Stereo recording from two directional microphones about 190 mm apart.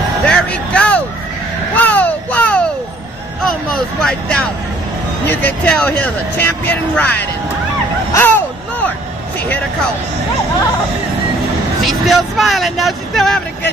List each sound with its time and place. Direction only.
0.3 s a sound: 5° left (ahead or behind)
5.2 s speech: 10° left (ahead or behind)
11.8 s speech: centre (ahead or behind)